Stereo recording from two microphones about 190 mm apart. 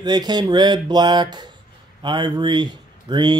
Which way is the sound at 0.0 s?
20° right (ahead or behind).